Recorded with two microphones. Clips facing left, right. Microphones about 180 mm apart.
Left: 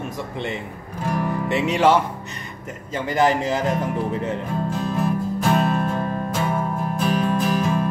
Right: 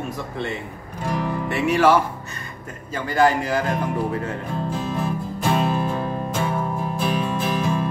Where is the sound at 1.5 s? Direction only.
20° left (ahead or behind).